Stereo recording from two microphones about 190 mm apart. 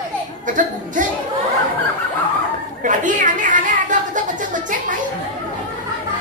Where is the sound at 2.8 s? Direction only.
40° right (ahead or behind).